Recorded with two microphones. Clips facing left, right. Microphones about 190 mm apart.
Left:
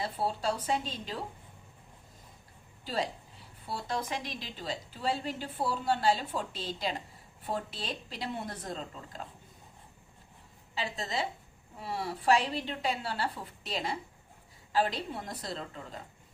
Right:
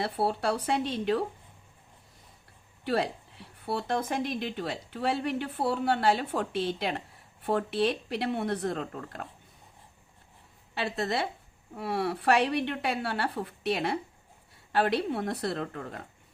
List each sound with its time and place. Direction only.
0.0 s a woman's voice: 65° right (ahead or behind)
2.8 s a woman's voice: 65° right (ahead or behind)
10.8 s a woman's voice: 65° right (ahead or behind)